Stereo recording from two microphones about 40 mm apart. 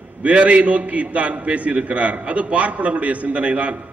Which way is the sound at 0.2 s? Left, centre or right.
Right.